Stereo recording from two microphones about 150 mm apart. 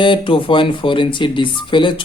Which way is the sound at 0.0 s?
35° left (ahead or behind).